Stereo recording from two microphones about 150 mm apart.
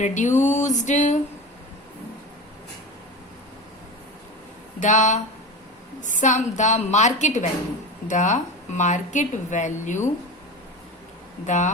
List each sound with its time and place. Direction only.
0.0 s a woman's voice: 55° left (ahead or behind)
4.8 s a woman's voice: 55° left (ahead or behind)
11.4 s a woman's voice: 55° left (ahead or behind)